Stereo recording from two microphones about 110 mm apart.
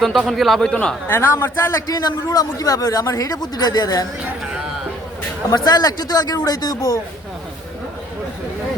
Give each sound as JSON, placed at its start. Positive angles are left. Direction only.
{"t": 0.0, "sound": "a man's voice", "side_deg": 0}
{"t": 1.0, "sound": "a man's voice", "side_deg": 20}
{"t": 1.9, "sound": "a man's voice", "side_deg": 35}
{"t": 5.5, "sound": "a man's voice", "side_deg": 35}